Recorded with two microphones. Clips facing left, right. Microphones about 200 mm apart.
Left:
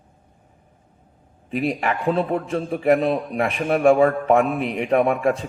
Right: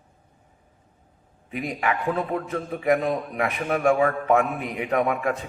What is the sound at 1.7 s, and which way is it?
A man's voice, 30° left (ahead or behind).